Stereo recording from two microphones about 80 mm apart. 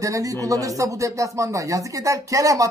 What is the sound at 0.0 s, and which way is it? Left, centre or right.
Speech, right.